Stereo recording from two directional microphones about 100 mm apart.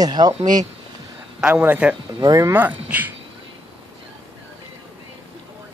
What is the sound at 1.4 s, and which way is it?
Speech, 20° right (ahead or behind).